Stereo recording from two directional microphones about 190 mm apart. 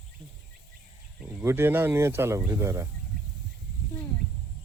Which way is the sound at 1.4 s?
10° right (ahead or behind).